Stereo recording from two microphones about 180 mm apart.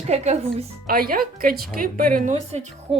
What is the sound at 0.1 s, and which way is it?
Speech, 35° right (ahead or behind).